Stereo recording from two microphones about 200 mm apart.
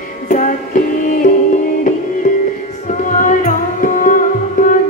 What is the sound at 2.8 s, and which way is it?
Music, 40° left (ahead or behind).